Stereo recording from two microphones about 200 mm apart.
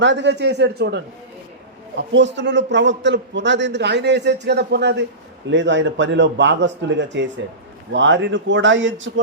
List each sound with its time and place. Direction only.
0.0 s a man's voice: 65° right (ahead or behind)